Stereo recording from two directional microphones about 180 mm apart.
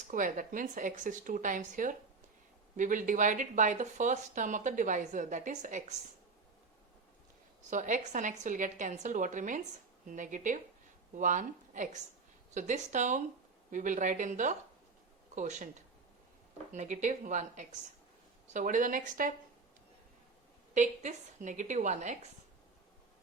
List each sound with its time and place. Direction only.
0.1 s speech: 45° right (ahead or behind)
7.7 s speech: 45° right (ahead or behind)
16.7 s speech: 40° right (ahead or behind)
20.7 s speech: 45° right (ahead or behind)